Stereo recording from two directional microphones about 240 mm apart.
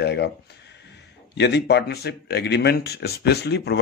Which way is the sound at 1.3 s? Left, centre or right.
Left.